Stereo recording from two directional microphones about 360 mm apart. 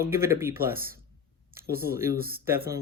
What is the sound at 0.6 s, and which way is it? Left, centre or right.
Speech, right.